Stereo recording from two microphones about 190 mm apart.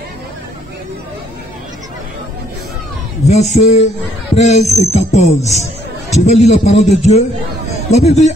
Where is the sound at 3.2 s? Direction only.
35° left (ahead or behind).